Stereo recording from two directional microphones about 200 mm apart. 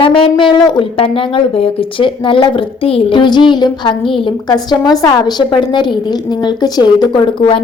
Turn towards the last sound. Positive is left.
turn(degrees=25)  # may be behind; listen again after turning